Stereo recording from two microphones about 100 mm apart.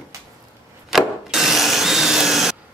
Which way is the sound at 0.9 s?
5° right (ahead or behind).